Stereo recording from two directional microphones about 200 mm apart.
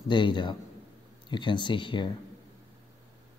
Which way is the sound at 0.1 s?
25° left (ahead or behind).